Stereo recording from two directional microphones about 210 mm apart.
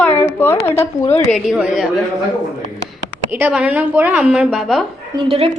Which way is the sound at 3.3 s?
5° right (ahead or behind).